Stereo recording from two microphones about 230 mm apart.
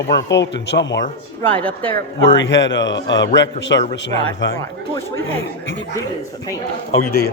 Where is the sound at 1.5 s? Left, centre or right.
Centre.